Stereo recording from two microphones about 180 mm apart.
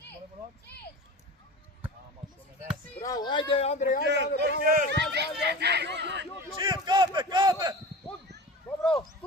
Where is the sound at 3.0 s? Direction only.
20° left (ahead or behind); by 4.0 s 45° left (ahead or behind).